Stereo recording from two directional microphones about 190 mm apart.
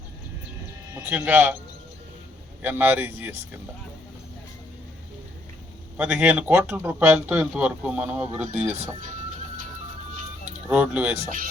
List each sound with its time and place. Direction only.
0.9 s speech: 10° right (ahead or behind)
2.6 s speech: 10° right (ahead or behind)
6.0 s speech: 10° right (ahead or behind)
10.7 s speech: 5° right (ahead or behind)
11.2 s speech: 45° right (ahead or behind)